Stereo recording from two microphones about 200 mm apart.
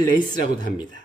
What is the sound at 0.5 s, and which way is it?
Speech, 20° left (ahead or behind).